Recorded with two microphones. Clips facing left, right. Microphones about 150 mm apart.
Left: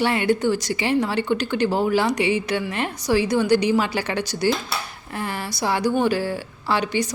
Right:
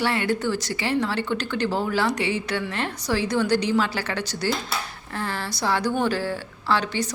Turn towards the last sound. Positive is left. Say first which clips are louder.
# left 2 dB
turn(degrees=15)  # may be behind; listen again after turning